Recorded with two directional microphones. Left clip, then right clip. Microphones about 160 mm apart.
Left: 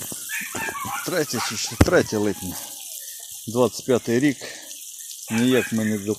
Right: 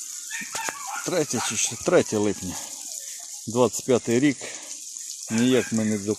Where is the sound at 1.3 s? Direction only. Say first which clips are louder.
Even; 35° right (ahead or behind).